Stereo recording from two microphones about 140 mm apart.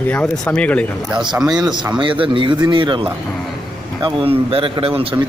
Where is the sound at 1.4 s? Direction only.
25° right (ahead or behind).